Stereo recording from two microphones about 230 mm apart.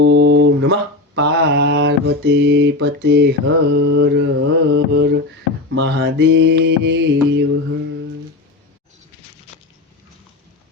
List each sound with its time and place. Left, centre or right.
0.0 s mantra: right